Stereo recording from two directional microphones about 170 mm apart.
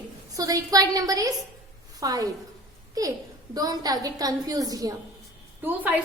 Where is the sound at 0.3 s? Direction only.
20° right (ahead or behind).